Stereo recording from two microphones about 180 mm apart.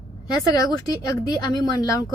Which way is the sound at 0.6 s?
20° left (ahead or behind).